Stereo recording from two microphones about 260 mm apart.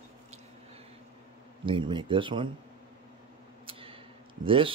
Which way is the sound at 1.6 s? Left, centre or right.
Centre.